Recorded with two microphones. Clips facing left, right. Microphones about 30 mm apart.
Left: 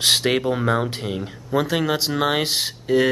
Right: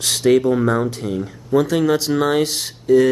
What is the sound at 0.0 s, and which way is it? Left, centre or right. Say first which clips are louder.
Speech: right 4 dB; left.